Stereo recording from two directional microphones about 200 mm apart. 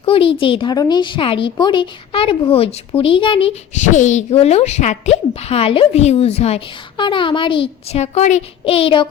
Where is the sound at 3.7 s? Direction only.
35° left (ahead or behind).